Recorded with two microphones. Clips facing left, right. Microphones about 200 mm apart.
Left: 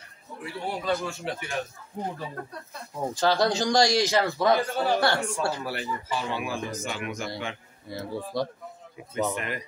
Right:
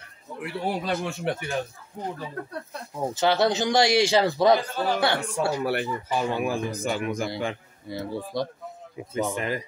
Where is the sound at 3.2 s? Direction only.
20° right (ahead or behind).